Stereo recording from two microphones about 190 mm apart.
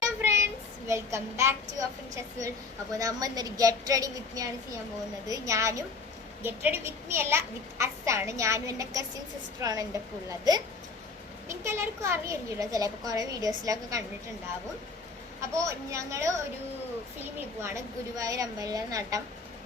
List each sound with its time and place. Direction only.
0.2 s a sound: 15° right (ahead or behind)
0.9 s a child's voice: 15° right (ahead or behind)
2.9 s a woman's voice: 20° right (ahead or behind)
15.4 s a child's voice: 15° right (ahead or behind)
17.6 s a child's voice: 15° right (ahead or behind)